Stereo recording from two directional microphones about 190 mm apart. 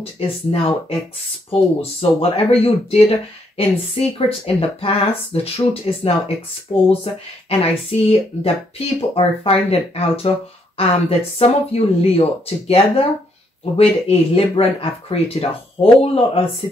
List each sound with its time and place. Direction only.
0.0 s speech: 30° left (ahead or behind)
7.4 s speech: 30° left (ahead or behind)